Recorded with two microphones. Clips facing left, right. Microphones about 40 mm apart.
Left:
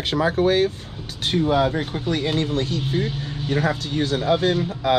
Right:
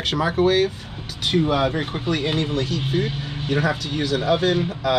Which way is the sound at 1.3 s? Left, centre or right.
Right.